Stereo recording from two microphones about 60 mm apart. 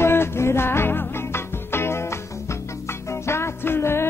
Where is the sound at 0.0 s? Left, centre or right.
Left.